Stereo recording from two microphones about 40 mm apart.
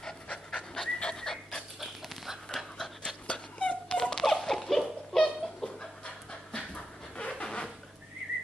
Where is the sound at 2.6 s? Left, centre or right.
Centre.